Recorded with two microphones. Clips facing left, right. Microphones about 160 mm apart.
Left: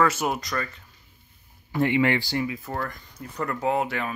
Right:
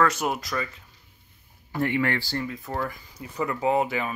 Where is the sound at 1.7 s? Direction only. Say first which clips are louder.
Left 3 dB; 20° left (ahead or behind).